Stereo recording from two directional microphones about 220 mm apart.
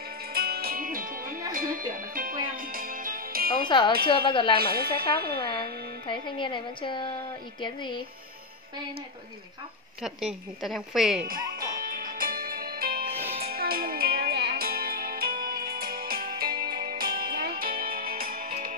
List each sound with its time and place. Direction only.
0.3 s music: 45° right (ahead or behind)
3.6 s a woman's voice: 20° left (ahead or behind)
4.6 s speech: 45° right (ahead or behind)
6.0 s a woman's voice: 20° left (ahead or behind)
10.0 s a woman's voice: centre (ahead or behind)
11.8 s music: 40° right (ahead or behind)